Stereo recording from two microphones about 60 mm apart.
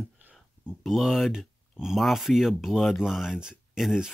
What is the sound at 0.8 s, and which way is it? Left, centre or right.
Speech, centre.